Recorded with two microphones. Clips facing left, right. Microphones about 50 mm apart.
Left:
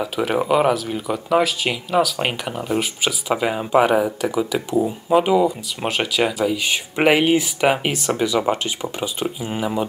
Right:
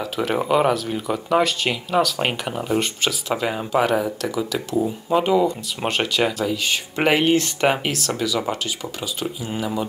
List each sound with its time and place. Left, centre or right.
0.0 s speech: centre
7.8 s speech: centre